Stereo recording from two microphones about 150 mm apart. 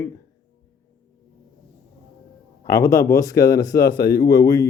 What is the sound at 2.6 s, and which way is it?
Speech, 20° left (ahead or behind).